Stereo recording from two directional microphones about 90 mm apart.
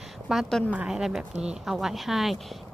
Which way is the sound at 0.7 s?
10° right (ahead or behind).